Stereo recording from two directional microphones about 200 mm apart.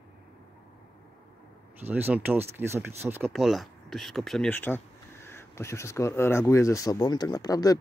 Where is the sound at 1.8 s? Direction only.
10° right (ahead or behind).